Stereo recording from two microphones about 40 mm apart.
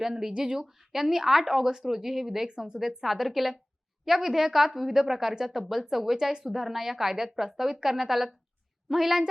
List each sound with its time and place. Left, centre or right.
0.0 s a woman's voice: centre
0.7 s a woman's voice: centre